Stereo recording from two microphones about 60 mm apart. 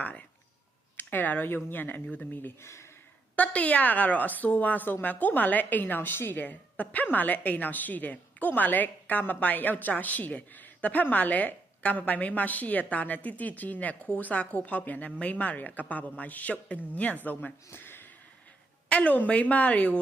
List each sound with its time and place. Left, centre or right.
0.0 s a sound: left
0.9 s speech: left
2.6 s speech: left
3.3 s a woman's voice: left
17.7 s a sound: left
18.9 s a woman's voice: left